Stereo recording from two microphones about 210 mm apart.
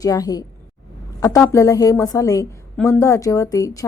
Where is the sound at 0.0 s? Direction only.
15° left (ahead or behind).